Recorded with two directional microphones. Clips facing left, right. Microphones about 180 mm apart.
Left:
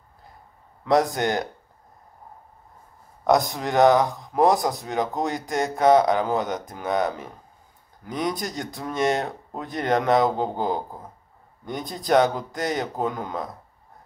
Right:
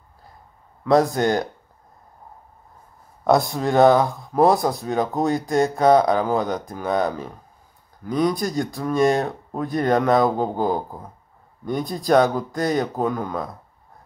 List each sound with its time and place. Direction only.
0.8 s speech: 20° left (ahead or behind)
3.3 s speech: 20° left (ahead or behind)